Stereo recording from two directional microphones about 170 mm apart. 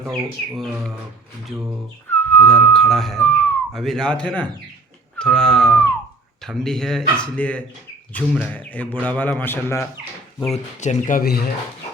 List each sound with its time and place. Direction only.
0.0 s speech: centre (ahead or behind)
2.3 s a man's voice: 10° left (ahead or behind)
10.5 s speech: 45° left (ahead or behind)
11.2 s speech: 65° left (ahead or behind)